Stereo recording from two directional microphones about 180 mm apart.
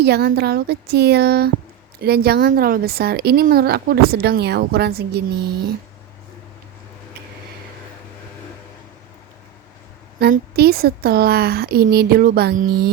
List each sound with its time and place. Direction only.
0.0 s speech: 65° right (ahead or behind)
10.2 s speech: 60° right (ahead or behind)